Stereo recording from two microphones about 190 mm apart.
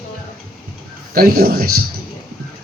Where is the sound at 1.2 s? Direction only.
50° right (ahead or behind).